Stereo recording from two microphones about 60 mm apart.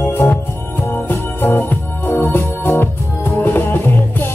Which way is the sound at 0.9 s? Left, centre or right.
Left.